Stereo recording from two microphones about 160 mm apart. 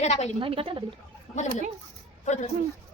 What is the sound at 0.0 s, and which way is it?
Speech, 45° left (ahead or behind).